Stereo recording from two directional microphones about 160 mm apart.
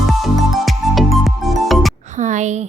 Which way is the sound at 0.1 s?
Centre (ahead or behind).